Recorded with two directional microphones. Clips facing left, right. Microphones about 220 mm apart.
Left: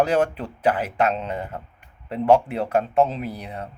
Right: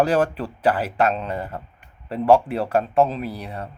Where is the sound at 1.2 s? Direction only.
20° left (ahead or behind).